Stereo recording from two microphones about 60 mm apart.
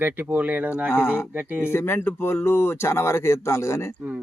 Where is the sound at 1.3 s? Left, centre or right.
Right.